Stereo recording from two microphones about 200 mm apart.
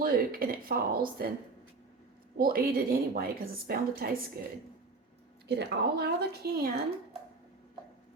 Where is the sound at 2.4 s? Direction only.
50° right (ahead or behind).